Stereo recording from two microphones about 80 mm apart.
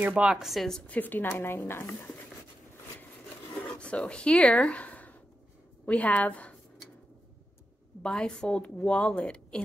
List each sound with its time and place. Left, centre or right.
0.0 s a woman's voice: centre
0.3 s a woman's voice: centre
0.8 s a woman's voice: left
3.6 s a woman's voice: centre
8.0 s a woman's voice: centre